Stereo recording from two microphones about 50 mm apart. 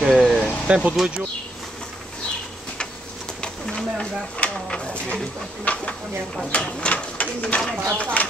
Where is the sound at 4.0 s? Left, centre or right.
Left.